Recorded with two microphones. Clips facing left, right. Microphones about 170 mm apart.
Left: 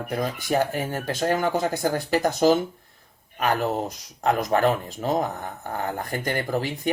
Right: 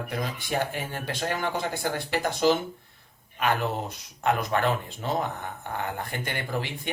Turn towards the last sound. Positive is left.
turn(degrees=40)  # may be behind; listen again after turning